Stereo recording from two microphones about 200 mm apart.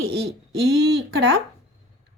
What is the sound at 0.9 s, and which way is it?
Speech, 65° right (ahead or behind).